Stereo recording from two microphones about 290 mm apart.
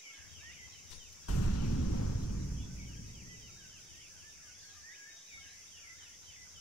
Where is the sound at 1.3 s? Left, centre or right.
Left.